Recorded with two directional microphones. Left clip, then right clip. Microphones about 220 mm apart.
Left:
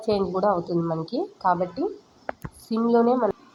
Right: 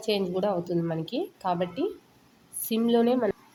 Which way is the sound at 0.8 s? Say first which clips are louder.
Left 4 dB; 20° right (ahead or behind).